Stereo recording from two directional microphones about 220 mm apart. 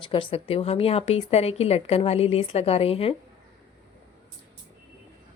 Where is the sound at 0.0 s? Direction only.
25° left (ahead or behind).